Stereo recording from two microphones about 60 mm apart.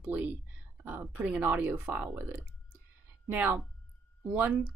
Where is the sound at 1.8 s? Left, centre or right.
Centre.